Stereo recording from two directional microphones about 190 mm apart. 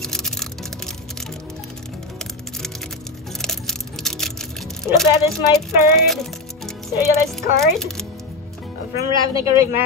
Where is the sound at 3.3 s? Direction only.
Centre (ahead or behind).